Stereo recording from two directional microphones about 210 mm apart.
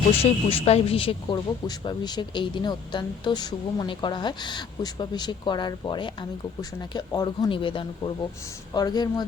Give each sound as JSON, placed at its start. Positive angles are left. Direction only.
{"t": 0.2, "sound": "speech", "side_deg": 30}